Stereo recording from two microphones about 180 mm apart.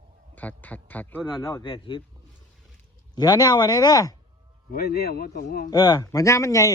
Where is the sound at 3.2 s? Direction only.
20° left (ahead or behind).